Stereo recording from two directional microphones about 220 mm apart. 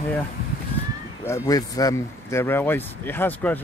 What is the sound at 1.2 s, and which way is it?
Speech, 15° left (ahead or behind).